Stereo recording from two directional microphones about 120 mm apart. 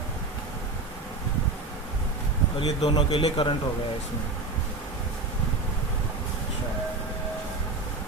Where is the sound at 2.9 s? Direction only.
45° left (ahead or behind).